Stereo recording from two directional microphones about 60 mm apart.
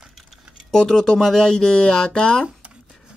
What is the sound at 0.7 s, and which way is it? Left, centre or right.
Speech, centre.